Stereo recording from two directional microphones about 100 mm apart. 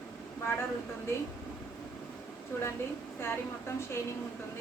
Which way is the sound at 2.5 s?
25° left (ahead or behind).